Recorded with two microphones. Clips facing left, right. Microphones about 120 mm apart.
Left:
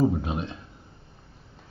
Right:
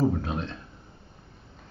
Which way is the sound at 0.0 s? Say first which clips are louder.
Left 2 dB; 15° left (ahead or behind).